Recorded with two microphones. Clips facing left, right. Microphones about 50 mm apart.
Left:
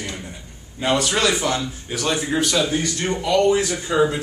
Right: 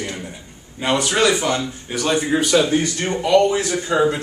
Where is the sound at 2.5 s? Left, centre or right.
Centre.